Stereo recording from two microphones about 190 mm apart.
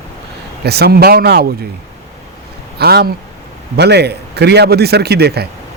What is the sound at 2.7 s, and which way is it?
Speech, 60° right (ahead or behind).